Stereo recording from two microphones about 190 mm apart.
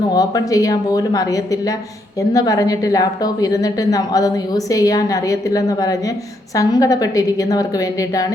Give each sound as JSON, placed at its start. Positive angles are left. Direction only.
{"t": 0.1, "sound": "a woman's voice", "side_deg": 20}